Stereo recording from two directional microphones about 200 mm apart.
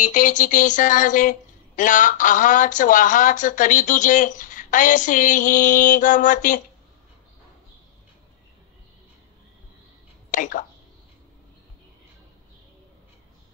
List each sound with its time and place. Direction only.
0.0 s speech: 40° left (ahead or behind)
10.3 s speech: 40° left (ahead or behind)